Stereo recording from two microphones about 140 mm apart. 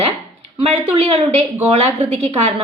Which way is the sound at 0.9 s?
45° right (ahead or behind).